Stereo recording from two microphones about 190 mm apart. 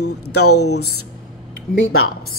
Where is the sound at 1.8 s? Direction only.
90° left.